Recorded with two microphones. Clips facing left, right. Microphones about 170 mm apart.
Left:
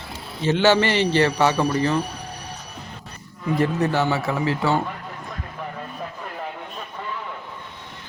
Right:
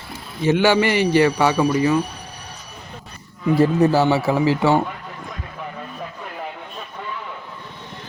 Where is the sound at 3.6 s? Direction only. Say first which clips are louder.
Right 5 dB; 30° right (ahead or behind).